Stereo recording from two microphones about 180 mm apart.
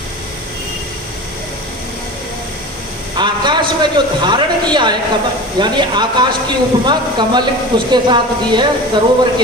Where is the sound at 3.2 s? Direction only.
25° right (ahead or behind).